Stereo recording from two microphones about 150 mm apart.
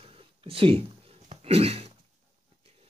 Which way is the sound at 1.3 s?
45° right (ahead or behind).